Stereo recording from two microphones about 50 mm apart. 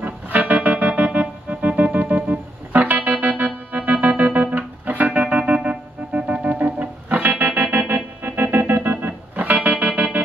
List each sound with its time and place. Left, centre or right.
0.0 s music: right